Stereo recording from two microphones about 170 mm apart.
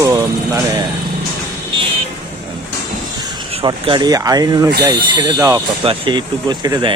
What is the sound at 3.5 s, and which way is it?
Speech, 35° right (ahead or behind).